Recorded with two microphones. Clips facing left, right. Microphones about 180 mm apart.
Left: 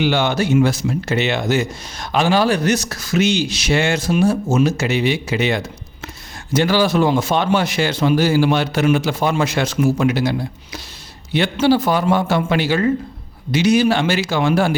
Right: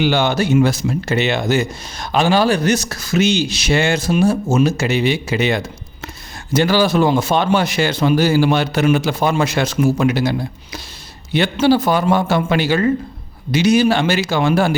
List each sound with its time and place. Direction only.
0.0 s a man's voice: 35° right (ahead or behind)